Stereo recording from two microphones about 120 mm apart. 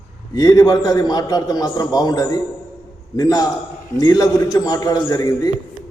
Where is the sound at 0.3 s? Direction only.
30° left (ahead or behind).